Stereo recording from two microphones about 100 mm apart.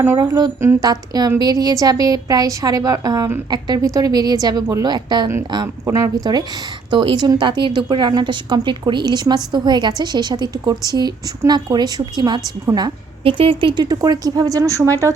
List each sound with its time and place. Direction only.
0.2 s a woman's voice: 45° right (ahead or behind)
5.8 s a woman's voice: 35° right (ahead or behind)
6.9 s a woman's voice: 55° right (ahead or behind)
12.7 s a woman's voice: 30° right (ahead or behind)
13.2 s speech: 65° right (ahead or behind)
13.8 s a woman's voice: 40° right (ahead or behind)